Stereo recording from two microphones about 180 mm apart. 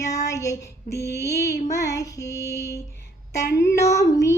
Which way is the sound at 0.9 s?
65° left (ahead or behind).